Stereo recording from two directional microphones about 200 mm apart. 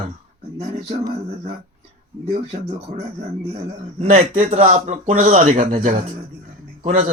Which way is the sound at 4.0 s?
30° right (ahead or behind).